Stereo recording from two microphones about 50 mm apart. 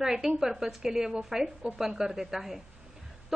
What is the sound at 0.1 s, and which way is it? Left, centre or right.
A woman's voice, centre.